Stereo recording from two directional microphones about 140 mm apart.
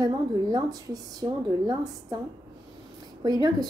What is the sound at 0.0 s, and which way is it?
Speech, 30° right (ahead or behind).